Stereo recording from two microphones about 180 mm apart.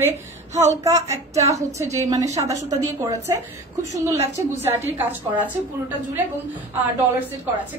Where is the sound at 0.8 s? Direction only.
15° right (ahead or behind).